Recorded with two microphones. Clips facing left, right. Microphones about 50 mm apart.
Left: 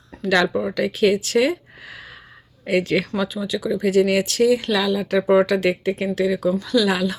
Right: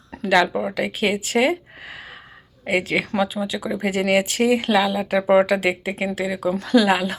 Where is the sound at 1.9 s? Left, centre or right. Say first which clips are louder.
Right 1 dB; centre.